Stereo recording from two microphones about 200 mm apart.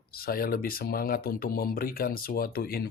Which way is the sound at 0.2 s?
45° left (ahead or behind).